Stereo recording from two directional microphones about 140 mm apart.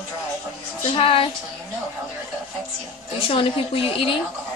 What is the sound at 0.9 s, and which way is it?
Speech, 40° left (ahead or behind).